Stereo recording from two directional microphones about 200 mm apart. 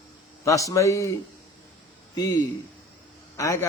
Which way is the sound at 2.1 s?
20° left (ahead or behind).